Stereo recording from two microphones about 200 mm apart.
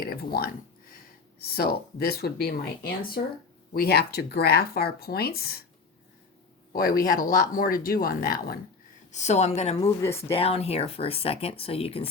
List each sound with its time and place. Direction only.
0.0 s speech: 50° left (ahead or behind)
6.7 s speech: 50° left (ahead or behind)
9.1 s a woman's voice: 35° left (ahead or behind)
10.0 s speech: 15° left (ahead or behind)
10.3 s speech: 30° left (ahead or behind)